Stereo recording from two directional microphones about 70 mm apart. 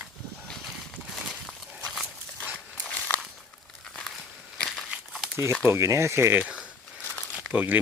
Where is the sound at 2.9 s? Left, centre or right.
Left.